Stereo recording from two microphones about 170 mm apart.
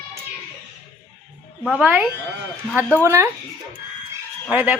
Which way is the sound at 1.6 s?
5° right (ahead or behind).